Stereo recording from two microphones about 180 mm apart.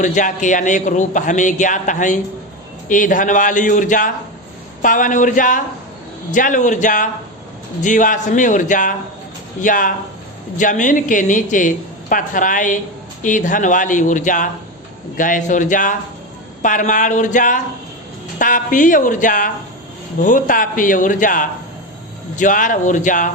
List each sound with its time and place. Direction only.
0.0 s a woman's voice: 45° left (ahead or behind)